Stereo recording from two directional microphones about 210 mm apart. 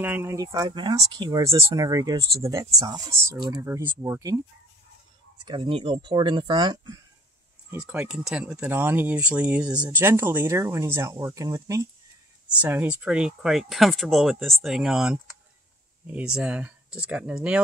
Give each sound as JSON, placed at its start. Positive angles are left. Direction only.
{"t": 0.0, "sound": "speech", "side_deg": -10}
{"t": 5.4, "sound": "speech", "side_deg": -25}
{"t": 7.7, "sound": "speech", "side_deg": -5}